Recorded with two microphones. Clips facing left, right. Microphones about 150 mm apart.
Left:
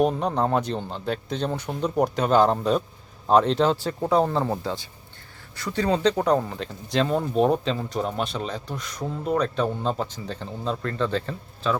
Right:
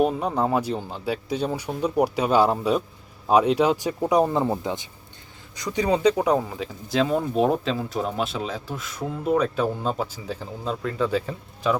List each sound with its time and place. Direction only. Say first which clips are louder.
0.0 s speech: even; 5° right (ahead or behind)